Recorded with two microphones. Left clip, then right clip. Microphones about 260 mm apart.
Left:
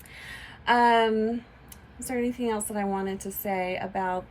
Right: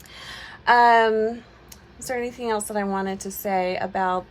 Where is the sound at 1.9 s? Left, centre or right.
Centre.